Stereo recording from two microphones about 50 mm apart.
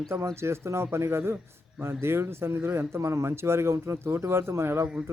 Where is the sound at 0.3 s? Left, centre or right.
Right.